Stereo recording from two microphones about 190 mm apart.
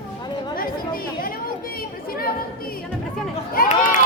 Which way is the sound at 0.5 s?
50° left (ahead or behind).